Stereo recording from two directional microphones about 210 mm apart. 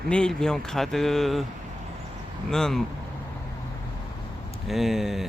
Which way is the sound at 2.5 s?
Centre (ahead or behind).